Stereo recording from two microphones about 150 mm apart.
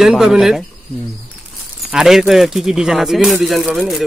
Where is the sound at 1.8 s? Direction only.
5° right (ahead or behind).